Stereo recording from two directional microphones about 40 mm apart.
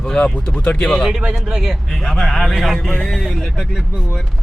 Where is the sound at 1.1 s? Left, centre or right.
Centre.